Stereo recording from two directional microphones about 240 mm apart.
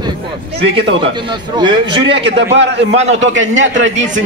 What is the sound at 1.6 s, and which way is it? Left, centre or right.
A man's voice, centre.